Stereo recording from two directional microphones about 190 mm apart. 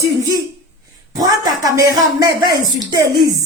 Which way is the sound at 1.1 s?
20° right (ahead or behind).